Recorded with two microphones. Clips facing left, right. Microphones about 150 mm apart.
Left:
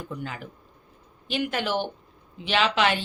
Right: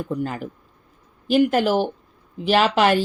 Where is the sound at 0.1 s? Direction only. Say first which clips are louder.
Right 9 dB; 45° right (ahead or behind).